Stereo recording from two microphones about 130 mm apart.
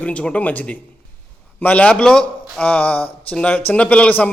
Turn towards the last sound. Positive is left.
turn(degrees=10)  # may be behind; listen again after turning